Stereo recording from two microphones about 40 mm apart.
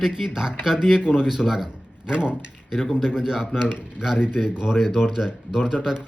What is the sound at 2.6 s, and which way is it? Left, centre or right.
Speech, centre.